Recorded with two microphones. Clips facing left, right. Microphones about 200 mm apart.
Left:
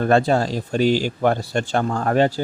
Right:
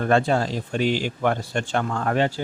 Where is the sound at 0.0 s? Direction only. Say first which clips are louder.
Left 3 dB; 40° left (ahead or behind).